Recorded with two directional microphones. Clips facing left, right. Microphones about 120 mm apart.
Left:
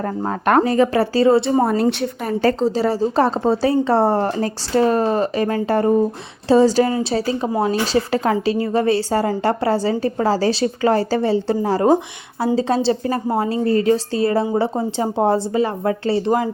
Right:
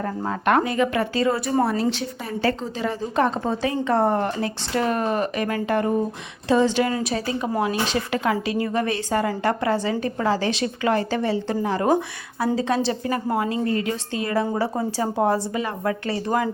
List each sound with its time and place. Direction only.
0.0 s a woman's voice: 40° left (ahead or behind)
1.6 s a woman's voice: 50° left (ahead or behind)
2.4 s a woman's voice: 35° left (ahead or behind)